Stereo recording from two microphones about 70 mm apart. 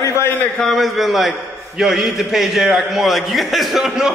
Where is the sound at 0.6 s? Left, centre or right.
Centre.